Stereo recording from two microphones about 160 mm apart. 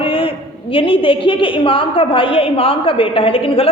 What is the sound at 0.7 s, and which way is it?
A woman's voice, 35° left (ahead or behind).